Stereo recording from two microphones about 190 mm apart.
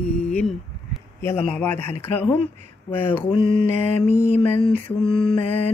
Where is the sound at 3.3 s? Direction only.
25° left (ahead or behind).